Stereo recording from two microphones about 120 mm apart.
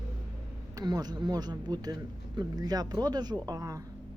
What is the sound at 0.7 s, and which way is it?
Speech, 35° right (ahead or behind).